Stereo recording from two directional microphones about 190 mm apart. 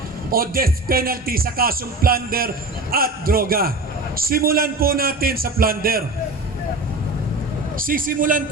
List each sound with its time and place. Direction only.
0.3 s speech: 50° right (ahead or behind)
7.8 s speech: 45° right (ahead or behind)